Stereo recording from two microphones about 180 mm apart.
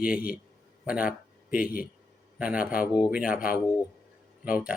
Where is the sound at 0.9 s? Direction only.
5° right (ahead or behind).